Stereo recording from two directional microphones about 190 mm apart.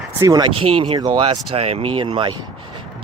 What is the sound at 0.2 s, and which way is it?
Speech, 20° right (ahead or behind).